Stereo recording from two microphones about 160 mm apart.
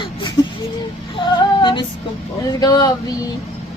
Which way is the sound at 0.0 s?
30° left (ahead or behind).